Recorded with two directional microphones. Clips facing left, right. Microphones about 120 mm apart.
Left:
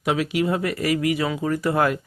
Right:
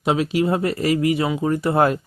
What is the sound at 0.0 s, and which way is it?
Speech, 25° right (ahead or behind).